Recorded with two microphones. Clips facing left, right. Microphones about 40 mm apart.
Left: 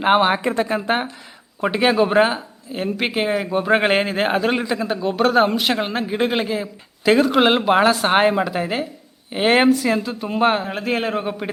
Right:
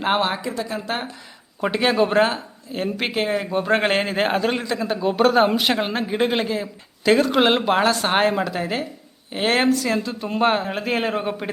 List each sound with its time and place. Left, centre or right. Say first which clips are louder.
0.0 s speech: left 5 dB; centre
0.3 s speech: left 6 dB; left
0.8 s speech: left 6 dB; left
1.6 s speech: left 2 dB; centre